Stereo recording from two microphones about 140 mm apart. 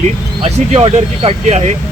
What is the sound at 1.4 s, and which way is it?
Speech, 55° right (ahead or behind).